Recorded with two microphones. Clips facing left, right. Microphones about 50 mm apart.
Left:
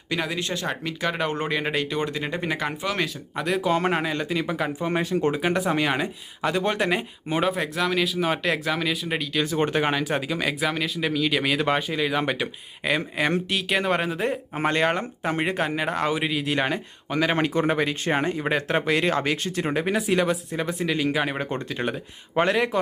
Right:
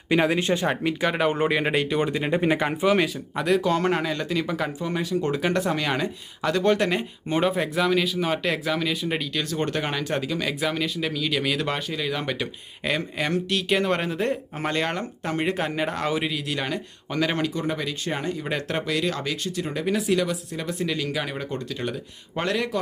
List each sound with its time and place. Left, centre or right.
0.1 s speech: right
3.3 s speech: centre
3.6 s speech: centre
4.8 s speech: left
5.3 s speech: centre
9.4 s speech: centre
14.7 s speech: centre
15.4 s speech: centre
16.6 s speech: left
17.1 s speech: centre
17.3 s speech: left
18.5 s speech: centre
18.9 s speech: left
20.7 s speech: centre